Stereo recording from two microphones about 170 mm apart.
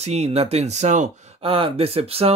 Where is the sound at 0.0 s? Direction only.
40° right (ahead or behind).